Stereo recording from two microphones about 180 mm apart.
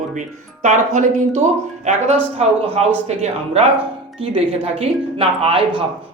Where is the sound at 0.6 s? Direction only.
40° right (ahead or behind).